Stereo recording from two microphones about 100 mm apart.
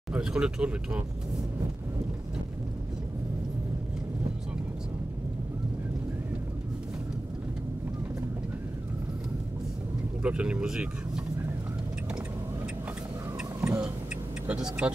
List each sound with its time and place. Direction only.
0.1 s speech: 10° right (ahead or behind)
10.2 s speech: 10° right (ahead or behind)
13.6 s vehicle: 15° right (ahead or behind)
14.5 s speech: 10° right (ahead or behind)